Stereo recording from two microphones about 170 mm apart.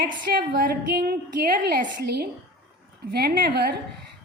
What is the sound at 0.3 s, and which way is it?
A woman's voice, 60° right (ahead or behind).